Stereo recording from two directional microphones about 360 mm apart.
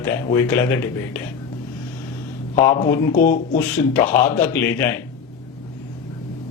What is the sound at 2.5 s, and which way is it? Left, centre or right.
Speech, centre.